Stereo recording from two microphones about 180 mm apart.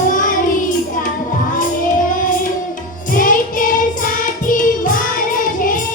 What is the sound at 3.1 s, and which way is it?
Child singing, 50° left (ahead or behind).